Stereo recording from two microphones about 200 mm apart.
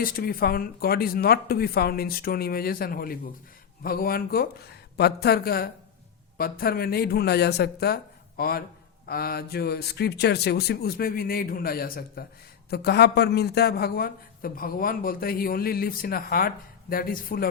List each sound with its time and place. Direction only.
0.0 s a man's voice: 45° left (ahead or behind)